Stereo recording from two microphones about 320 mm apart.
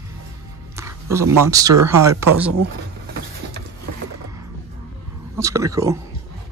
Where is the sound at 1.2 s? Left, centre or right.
Right.